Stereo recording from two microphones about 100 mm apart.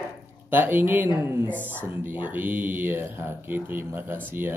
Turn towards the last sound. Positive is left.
turn(degrees=-20)  # may be behind; listen again after turning